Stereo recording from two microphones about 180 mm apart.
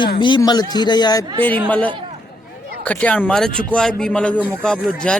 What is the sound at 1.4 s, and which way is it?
Speech, 10° left (ahead or behind).